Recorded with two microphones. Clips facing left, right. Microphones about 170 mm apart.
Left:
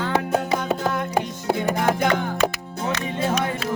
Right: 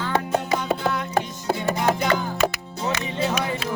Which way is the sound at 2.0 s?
55° left (ahead or behind).